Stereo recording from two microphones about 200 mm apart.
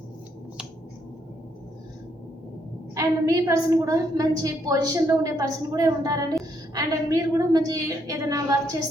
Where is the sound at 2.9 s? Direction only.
15° right (ahead or behind).